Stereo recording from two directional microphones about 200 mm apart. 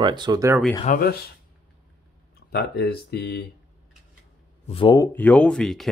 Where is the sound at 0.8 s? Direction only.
45° left (ahead or behind).